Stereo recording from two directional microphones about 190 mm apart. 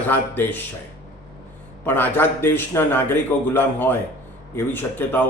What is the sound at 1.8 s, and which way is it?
A man's voice, 10° left (ahead or behind).